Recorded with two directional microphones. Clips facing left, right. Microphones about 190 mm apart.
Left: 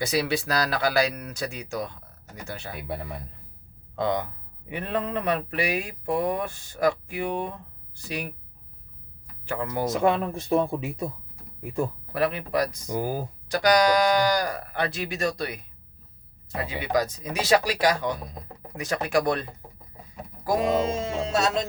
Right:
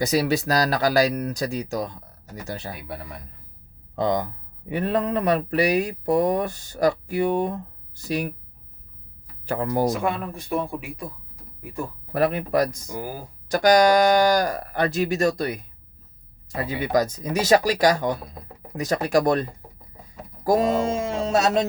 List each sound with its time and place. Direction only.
0.0 s speech: 40° right (ahead or behind)
3.9 s speech: 40° right (ahead or behind)
9.5 s speech: 40° right (ahead or behind)
10.0 s speech: 25° left (ahead or behind)
12.1 s speech: 45° right (ahead or behind)
12.9 s speech: 25° left (ahead or behind)
13.5 s speech: 45° right (ahead or behind)
16.6 s speech: 45° right (ahead or behind)